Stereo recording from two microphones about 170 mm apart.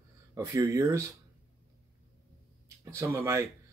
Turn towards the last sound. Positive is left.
turn(degrees=-15)  # may be behind; listen again after turning